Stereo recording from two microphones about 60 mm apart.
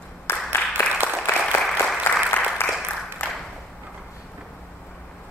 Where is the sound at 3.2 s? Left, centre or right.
Left.